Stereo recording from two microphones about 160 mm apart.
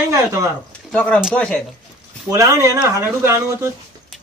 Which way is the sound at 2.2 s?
20° right (ahead or behind).